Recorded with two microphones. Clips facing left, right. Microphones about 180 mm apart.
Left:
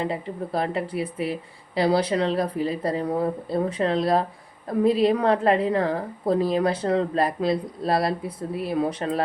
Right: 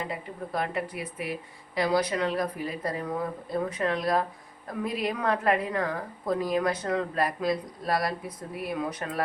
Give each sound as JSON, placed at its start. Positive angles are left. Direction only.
{"t": 0.0, "sound": "a woman's voice", "side_deg": 30}